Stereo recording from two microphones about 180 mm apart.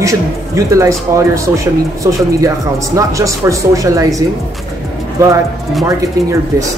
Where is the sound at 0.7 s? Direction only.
15° right (ahead or behind).